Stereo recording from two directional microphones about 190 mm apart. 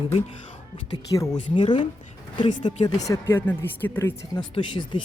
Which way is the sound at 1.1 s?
20° left (ahead or behind).